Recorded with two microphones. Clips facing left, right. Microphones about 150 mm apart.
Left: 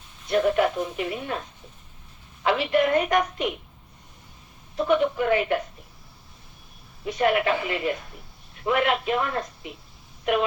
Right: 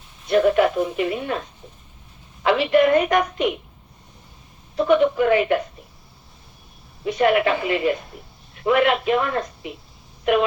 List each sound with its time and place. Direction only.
0.3 s speech: 90° right
2.4 s a woman's voice: 90° right
4.8 s a man's voice: 90° right
7.0 s a man's voice: 90° right
10.3 s speech: 80° right